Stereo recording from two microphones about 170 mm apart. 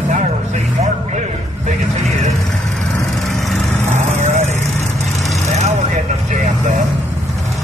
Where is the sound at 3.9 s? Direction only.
45° right (ahead or behind).